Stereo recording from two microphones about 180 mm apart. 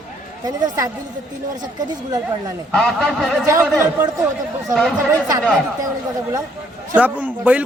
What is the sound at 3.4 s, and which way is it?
Speech, 15° right (ahead or behind).